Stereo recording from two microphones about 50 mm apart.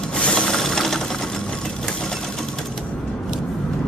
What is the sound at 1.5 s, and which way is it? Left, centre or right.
Sewing machine, centre.